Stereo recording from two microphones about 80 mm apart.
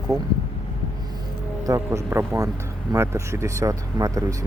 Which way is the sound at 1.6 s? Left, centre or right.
Right.